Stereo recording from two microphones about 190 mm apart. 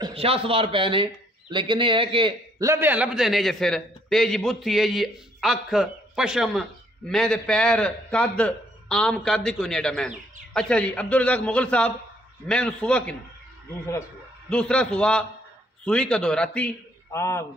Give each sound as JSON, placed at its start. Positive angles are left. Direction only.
{"t": 0.0, "sound": "speech", "side_deg": -30}
{"t": 2.6, "sound": "a man's voice", "side_deg": -15}
{"t": 14.5, "sound": "a man's voice", "side_deg": 5}